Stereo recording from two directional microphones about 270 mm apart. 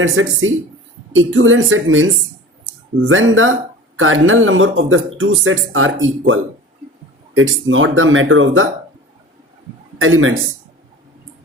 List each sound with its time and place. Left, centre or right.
0.0 s speech: right
10.0 s speech: right